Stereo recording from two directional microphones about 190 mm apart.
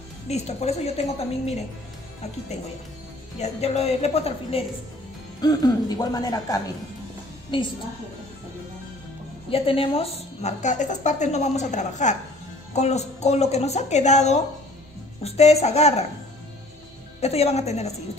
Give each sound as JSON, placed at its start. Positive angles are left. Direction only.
{"t": 0.3, "sound": "a woman's voice", "side_deg": 35}
{"t": 3.3, "sound": "a woman's voice", "side_deg": 35}
{"t": 5.4, "sound": "speech", "side_deg": 20}
{"t": 9.5, "sound": "a woman's voice", "side_deg": 30}
{"t": 17.2, "sound": "a woman's voice", "side_deg": 35}